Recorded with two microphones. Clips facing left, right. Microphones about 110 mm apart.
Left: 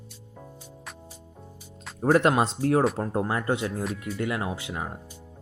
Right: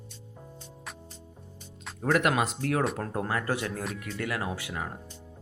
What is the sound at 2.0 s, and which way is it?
Speech, 30° left (ahead or behind).